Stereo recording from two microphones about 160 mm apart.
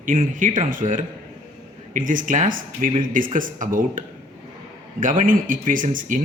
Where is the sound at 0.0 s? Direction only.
55° right (ahead or behind).